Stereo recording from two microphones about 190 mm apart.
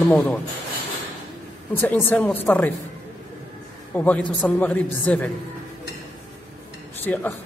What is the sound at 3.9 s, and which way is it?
Speech, 10° left (ahead or behind).